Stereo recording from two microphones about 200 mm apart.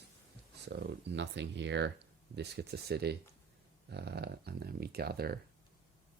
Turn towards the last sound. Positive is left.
turn(degrees=-50)  # may be behind; listen again after turning